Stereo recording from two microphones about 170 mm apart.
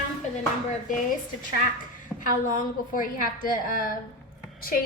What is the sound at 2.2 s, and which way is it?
A woman's voice, 50° left (ahead or behind).